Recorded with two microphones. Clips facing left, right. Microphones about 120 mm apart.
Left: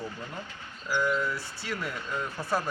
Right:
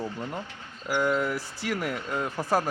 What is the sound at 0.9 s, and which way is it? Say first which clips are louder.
Speech: right 3 dB; 50° right (ahead or behind).